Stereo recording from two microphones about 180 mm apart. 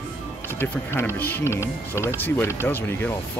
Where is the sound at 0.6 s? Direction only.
10° left (ahead or behind).